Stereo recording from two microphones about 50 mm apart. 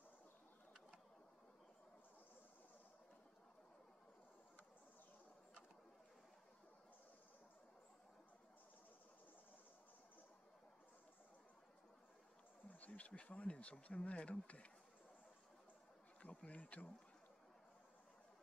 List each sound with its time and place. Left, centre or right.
12.6 s speech: left
16.2 s bee: left